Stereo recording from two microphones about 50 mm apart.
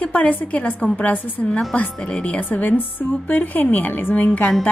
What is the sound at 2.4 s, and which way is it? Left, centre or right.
A woman's voice, left.